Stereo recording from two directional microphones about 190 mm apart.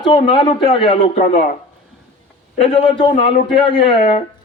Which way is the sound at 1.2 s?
40° left (ahead or behind).